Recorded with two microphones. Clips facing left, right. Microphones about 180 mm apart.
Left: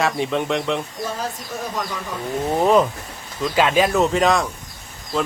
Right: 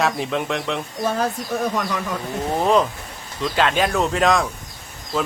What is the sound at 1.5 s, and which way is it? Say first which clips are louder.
Speech: right 7 dB; 55° right (ahead or behind).